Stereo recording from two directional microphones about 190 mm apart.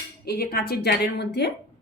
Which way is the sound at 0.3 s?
55° left (ahead or behind).